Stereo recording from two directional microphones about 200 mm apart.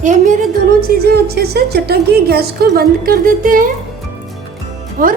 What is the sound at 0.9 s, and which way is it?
A woman's voice, 50° right (ahead or behind).